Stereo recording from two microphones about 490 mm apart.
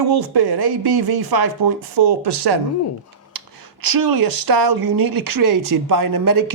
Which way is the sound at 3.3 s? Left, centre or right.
Right.